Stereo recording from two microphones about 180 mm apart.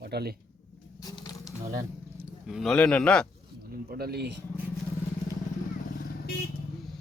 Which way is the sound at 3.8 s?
60° right (ahead or behind).